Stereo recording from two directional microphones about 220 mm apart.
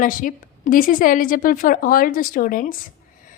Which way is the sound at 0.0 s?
40° left (ahead or behind).